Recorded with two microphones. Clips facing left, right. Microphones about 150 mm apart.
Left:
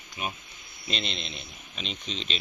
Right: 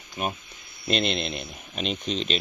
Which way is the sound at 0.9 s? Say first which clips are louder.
Right 9 dB; 55° right (ahead or behind).